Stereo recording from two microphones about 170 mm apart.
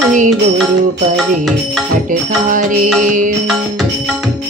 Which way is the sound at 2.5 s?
50° right (ahead or behind).